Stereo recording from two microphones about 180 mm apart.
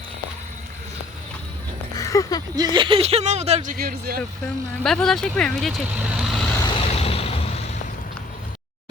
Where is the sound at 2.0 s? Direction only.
20° left (ahead or behind).